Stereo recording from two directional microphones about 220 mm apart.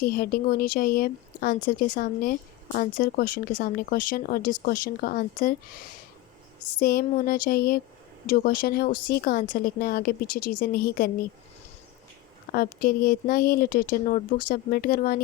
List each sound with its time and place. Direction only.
0.0 s a woman's voice: 45° left (ahead or behind)
6.7 s speech: 40° left (ahead or behind)
12.5 s speech: 40° left (ahead or behind)